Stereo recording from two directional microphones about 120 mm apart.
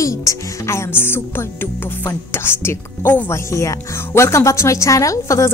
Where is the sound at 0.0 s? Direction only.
25° left (ahead or behind).